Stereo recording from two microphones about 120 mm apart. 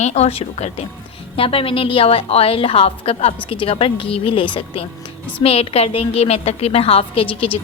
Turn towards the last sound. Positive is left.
turn(degrees=45)  # may be behind; listen again after turning